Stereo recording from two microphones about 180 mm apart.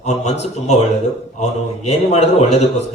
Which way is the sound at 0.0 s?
40° left (ahead or behind).